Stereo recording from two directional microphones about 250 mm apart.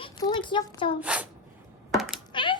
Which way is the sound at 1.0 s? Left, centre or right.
Centre.